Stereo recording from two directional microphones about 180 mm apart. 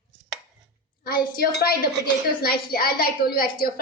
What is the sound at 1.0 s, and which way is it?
A woman's voice, 60° left (ahead or behind).